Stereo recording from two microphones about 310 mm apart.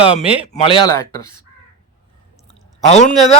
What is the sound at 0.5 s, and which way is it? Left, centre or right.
Speech, centre.